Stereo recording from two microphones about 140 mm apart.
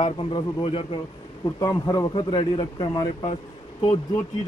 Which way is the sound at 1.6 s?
30° left (ahead or behind).